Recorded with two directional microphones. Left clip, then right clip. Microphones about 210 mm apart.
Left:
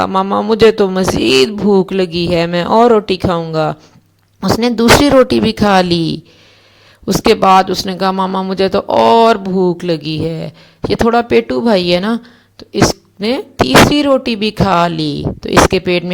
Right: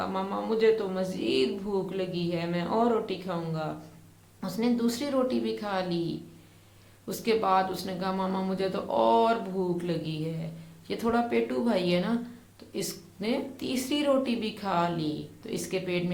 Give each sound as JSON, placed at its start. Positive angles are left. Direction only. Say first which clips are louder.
{"t": 0.0, "sound": "a woman's voice", "louder": "left 18 dB", "side_deg": 45}